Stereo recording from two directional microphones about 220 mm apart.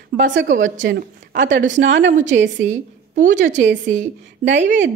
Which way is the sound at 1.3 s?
55° right (ahead or behind).